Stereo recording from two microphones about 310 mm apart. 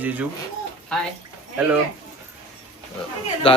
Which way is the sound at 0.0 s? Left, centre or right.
Centre.